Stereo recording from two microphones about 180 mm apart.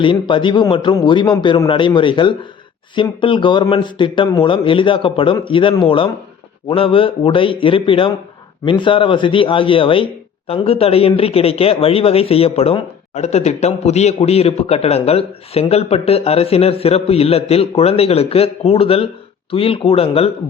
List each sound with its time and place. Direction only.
0.0 s speech: 25° left (ahead or behind)